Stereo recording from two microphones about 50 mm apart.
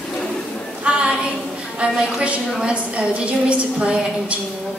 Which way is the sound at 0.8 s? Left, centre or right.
Right.